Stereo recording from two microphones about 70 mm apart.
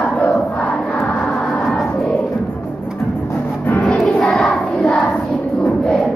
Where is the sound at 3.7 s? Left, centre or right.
Centre.